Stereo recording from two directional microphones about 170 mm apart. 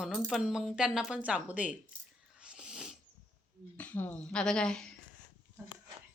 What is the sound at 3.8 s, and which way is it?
A woman's voice, 10° left (ahead or behind).